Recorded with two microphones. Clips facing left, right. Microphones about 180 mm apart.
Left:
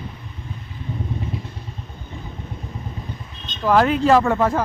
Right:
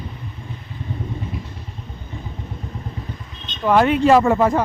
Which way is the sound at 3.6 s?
Centre (ahead or behind).